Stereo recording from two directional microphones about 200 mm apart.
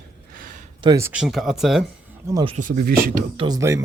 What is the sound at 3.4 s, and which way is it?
Speech, 20° right (ahead or behind).